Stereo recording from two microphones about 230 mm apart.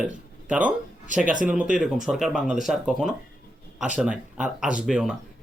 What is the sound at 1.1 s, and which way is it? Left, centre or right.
Speech, right.